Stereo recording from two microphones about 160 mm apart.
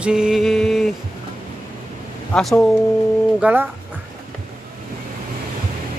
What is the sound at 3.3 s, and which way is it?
Speech, 10° right (ahead or behind).